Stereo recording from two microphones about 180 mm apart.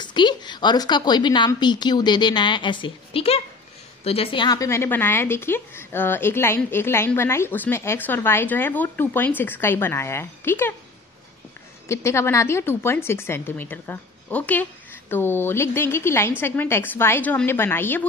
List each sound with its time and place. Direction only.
0.0 s a woman's voice: 25° left (ahead or behind)
11.9 s a woman's voice: 15° left (ahead or behind)